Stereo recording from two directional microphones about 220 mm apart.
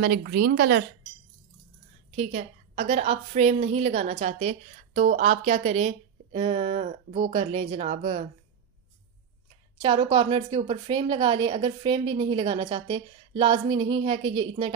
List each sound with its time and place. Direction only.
0.0 s a woman's voice: 45° right (ahead or behind)
2.1 s a woman's voice: 30° right (ahead or behind)
7.3 s a woman's voice: 25° right (ahead or behind)
9.8 s a woman's voice: 25° right (ahead or behind)